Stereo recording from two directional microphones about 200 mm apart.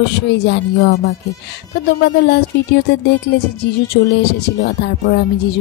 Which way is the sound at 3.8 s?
55° left (ahead or behind).